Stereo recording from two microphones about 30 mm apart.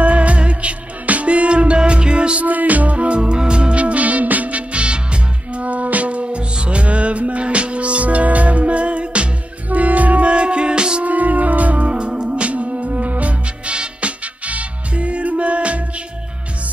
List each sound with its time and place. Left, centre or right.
0.0 s music: right
2.4 s music: right
3.1 s music: right
3.8 s music: right
5.7 s music: right
9.7 s music: right
10.3 s music: right
11.1 s music: right
11.9 s music: right